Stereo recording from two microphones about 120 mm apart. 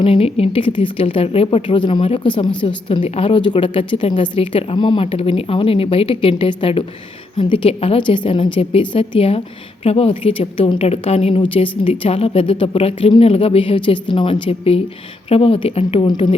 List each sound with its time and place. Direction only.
0.0 s speech: 50° left (ahead or behind)
14.4 s speech: 55° left (ahead or behind)